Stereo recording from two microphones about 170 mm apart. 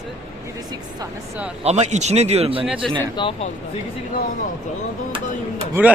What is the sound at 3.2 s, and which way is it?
Speech, 35° left (ahead or behind).